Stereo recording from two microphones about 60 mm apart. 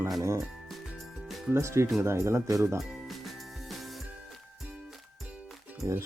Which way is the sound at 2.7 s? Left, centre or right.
Centre.